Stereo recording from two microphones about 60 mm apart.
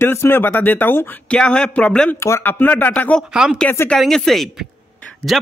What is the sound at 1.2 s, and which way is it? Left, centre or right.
Speech, centre.